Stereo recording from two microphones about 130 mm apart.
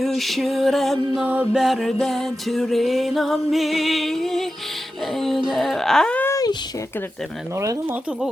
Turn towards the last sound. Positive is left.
turn(degrees=30)  # may be behind; listen again after turning